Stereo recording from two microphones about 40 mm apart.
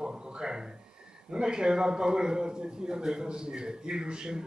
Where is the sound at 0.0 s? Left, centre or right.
Right.